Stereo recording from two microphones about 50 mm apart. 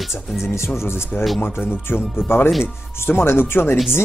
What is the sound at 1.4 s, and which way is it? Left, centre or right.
Speech, left.